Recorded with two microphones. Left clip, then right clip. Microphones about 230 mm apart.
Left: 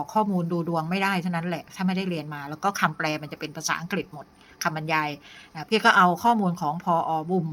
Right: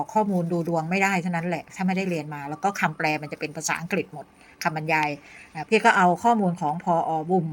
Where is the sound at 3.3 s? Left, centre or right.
Left.